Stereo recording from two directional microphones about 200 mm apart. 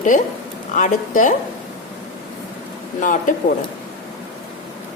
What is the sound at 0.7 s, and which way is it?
Speech, 40° left (ahead or behind).